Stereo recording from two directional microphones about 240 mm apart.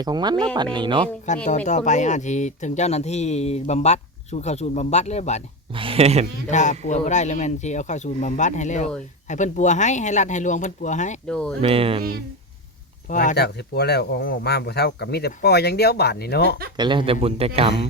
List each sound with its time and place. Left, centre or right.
0.0 s speech: centre
1.5 s speech: left
5.7 s speech: right
6.5 s speech: left
11.3 s speech: centre
11.6 s speech: right
13.1 s speech: left
16.7 s speech: centre